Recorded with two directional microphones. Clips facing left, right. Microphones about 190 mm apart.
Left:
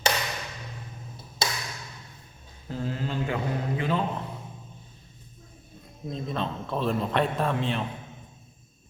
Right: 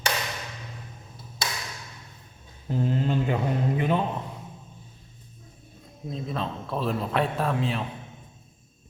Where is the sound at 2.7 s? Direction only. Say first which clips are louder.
Right 5 dB; 20° right (ahead or behind).